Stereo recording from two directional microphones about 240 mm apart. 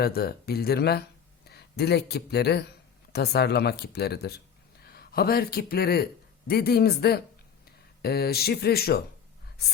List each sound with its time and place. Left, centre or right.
0.0 s speech: left